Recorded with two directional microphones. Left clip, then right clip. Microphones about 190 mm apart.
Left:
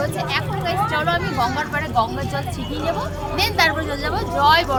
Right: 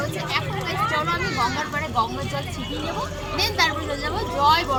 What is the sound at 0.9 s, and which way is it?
Speech, 25° left (ahead or behind).